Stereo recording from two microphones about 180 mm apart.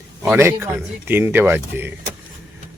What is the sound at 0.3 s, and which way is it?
Speech, 15° right (ahead or behind).